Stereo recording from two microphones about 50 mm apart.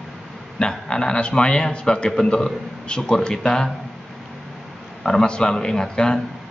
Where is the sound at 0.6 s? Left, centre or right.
Centre.